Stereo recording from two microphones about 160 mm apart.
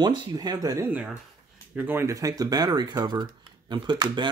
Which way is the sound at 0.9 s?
10° right (ahead or behind).